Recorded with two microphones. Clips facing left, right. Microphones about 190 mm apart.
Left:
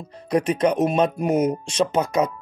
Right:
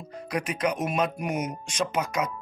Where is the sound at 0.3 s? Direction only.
30° left (ahead or behind).